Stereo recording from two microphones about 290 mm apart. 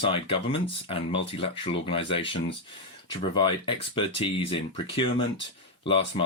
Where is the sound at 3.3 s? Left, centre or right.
Centre.